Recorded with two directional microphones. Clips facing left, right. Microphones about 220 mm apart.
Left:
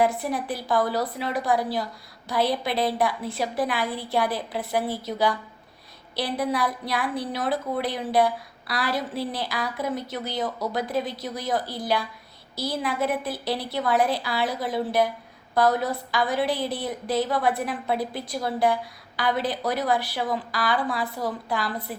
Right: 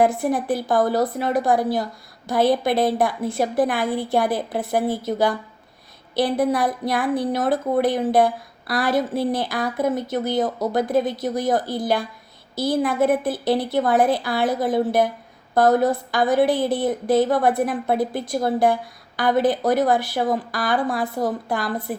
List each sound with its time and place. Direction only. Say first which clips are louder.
0.0 s a woman's voice: right 5 dB; 50° right (ahead or behind)